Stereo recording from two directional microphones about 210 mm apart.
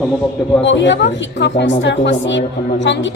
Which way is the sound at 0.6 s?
55° left (ahead or behind).